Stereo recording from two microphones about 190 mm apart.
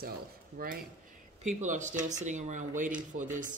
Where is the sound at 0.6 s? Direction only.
50° right (ahead or behind).